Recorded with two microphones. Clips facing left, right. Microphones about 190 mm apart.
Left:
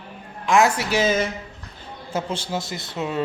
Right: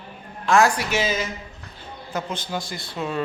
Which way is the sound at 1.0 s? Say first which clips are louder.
Left 6 dB; 50° left (ahead or behind).